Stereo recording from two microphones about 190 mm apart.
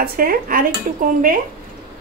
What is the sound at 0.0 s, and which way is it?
Speech, 50° right (ahead or behind).